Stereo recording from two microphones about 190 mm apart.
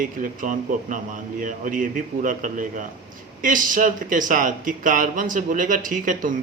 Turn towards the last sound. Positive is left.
turn(degrees=-45)  # may be behind; listen again after turning